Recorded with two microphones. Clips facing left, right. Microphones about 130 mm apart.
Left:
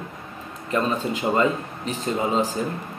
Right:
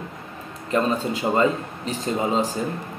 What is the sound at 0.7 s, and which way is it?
Speech, 35° right (ahead or behind).